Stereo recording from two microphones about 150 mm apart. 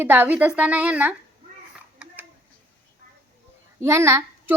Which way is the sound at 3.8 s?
20° right (ahead or behind).